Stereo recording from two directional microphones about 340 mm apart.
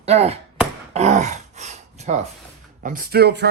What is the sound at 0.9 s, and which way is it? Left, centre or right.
Grunt, centre.